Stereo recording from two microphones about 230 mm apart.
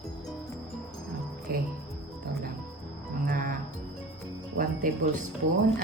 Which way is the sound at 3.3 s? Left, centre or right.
Right.